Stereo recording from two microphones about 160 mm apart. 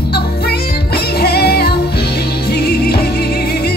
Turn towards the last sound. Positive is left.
turn(degrees=80)